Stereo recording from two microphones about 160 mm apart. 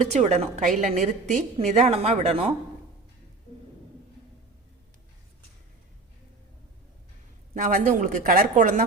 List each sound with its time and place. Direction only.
0.0 s a woman's voice: 45° right (ahead or behind)
7.5 s speech: 55° right (ahead or behind)